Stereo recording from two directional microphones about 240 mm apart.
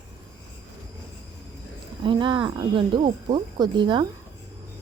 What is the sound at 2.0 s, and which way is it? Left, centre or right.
Speech, centre.